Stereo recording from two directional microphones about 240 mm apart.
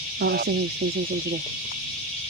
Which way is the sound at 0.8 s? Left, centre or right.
Right.